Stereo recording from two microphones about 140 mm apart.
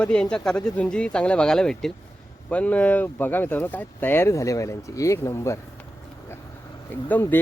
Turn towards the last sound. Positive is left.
turn(degrees=15)  # may be behind; listen again after turning